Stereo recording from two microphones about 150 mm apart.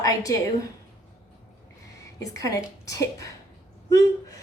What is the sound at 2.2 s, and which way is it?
A woman's voice, 25° left (ahead or behind).